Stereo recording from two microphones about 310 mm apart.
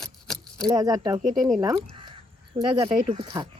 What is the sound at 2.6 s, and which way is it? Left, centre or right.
Speech, centre.